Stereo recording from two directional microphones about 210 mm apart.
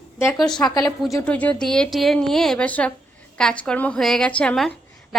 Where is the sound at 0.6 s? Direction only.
20° left (ahead or behind).